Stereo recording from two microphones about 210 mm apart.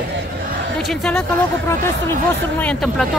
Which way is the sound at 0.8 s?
5° left (ahead or behind).